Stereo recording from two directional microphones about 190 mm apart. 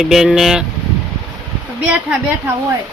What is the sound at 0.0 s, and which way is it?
Speech, centre (ahead or behind).